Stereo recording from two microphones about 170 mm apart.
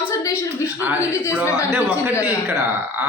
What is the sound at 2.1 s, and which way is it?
Speech, 20° left (ahead or behind).